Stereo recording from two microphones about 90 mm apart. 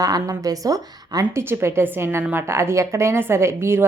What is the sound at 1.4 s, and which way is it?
A woman's voice, 30° right (ahead or behind).